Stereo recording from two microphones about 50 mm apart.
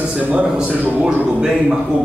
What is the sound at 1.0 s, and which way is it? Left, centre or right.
Speech, centre.